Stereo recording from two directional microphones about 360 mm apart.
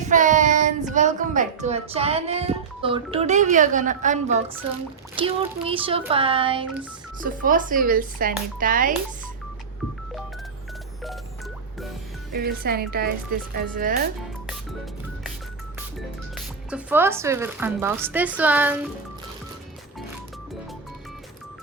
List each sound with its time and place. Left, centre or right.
0.1 s child singing: right
5.1 s speech: centre
12.3 s speech: right
16.0 s speech: centre